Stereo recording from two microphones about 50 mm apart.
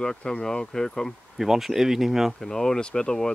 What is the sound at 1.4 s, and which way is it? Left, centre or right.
Speech, centre.